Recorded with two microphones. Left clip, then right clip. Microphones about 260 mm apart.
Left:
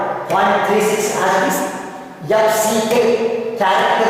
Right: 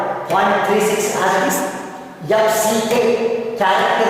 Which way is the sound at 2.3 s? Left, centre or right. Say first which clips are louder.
Left 1 dB; centre.